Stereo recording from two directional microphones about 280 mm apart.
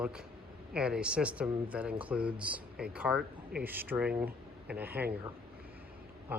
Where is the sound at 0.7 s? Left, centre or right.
Centre.